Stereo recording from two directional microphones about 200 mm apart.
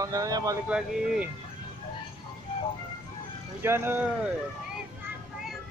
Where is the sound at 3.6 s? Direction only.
10° right (ahead or behind).